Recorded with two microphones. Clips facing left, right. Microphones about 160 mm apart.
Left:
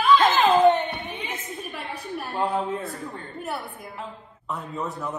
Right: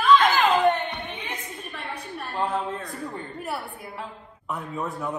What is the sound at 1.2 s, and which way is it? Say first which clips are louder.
A woman's voice: left 2 dB; 5° left (ahead or behind).